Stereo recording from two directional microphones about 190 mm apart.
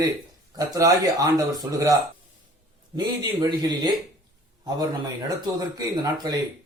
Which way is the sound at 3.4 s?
20° right (ahead or behind).